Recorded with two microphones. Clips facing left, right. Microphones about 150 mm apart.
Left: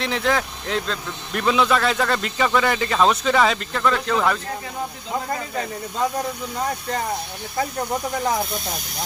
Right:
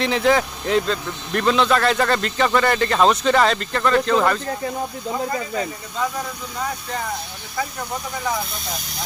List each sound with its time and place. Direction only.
0.0 s speech: centre (ahead or behind)